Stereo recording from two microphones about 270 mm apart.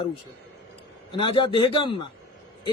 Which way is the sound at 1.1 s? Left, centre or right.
Centre.